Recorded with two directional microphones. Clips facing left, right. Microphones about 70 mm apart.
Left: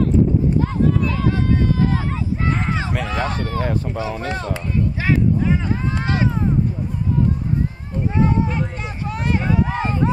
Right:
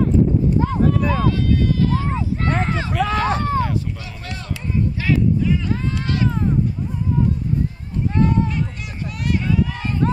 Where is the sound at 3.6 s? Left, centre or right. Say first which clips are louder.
Left 1 dB; left.